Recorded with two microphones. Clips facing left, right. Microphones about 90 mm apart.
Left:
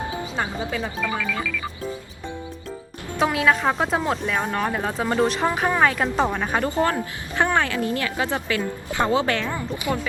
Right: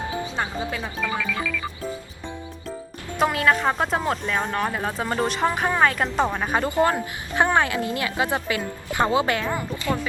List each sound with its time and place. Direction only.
0.3 s speech: centre (ahead or behind)
3.2 s speech: centre (ahead or behind)
6.7 s speech: 20° right (ahead or behind)
9.9 s speech: 15° left (ahead or behind)